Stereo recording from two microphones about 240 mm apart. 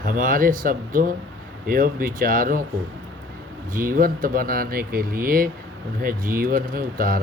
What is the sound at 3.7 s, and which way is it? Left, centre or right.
Speech, right.